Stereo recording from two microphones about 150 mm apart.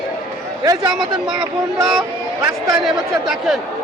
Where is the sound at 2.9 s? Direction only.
Centre (ahead or behind).